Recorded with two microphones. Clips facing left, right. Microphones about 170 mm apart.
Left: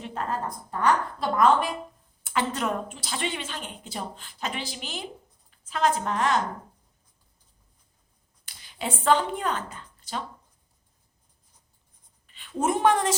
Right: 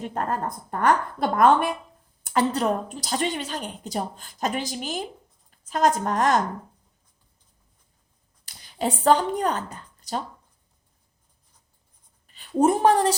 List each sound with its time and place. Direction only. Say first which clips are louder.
0.0 s a woman's voice: right 3 dB; 45° right (ahead or behind)
2.2 s a woman's voice: right 5 dB; 40° right (ahead or behind)
8.4 s a woman's voice: right 6 dB; 40° right (ahead or behind)
12.3 s a woman's voice: right 6 dB; 40° right (ahead or behind)